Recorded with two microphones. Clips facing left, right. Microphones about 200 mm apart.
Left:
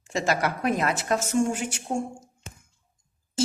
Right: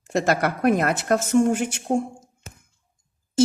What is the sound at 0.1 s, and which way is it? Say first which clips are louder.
A woman's voice: right 4 dB; 60° right (ahead or behind).